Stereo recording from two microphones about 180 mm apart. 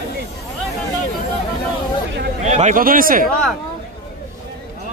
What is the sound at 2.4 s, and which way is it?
Speech, 40° right (ahead or behind).